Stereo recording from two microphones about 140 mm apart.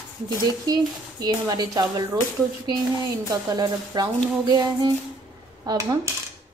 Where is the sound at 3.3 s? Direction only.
30° right (ahead or behind).